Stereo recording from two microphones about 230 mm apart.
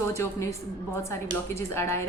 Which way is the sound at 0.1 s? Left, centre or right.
Centre.